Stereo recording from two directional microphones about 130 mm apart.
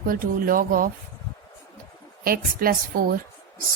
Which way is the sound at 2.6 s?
90° right.